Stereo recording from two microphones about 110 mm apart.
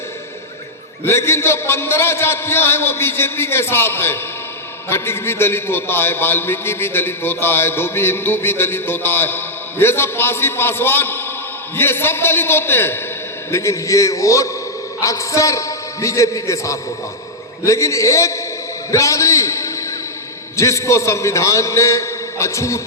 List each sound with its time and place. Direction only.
1.0 s a man's voice: 25° left (ahead or behind)
18.9 s a sound: 30° left (ahead or behind)
20.6 s a man's voice: 30° left (ahead or behind)